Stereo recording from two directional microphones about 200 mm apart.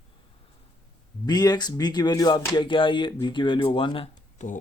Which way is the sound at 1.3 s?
20° left (ahead or behind).